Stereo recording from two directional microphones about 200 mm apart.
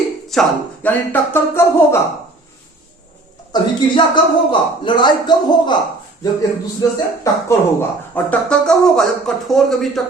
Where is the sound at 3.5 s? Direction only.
20° left (ahead or behind).